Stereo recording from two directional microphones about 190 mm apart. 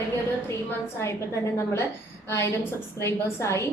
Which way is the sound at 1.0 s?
15° left (ahead or behind).